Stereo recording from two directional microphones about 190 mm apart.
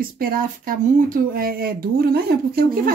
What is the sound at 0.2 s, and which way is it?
Speech, 50° right (ahead or behind).